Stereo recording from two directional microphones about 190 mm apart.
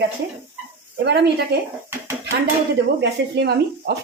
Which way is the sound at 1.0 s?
60° right (ahead or behind).